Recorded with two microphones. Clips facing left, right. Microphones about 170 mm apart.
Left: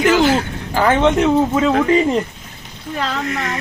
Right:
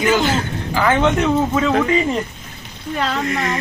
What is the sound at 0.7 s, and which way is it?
Speech, 35° left (ahead or behind).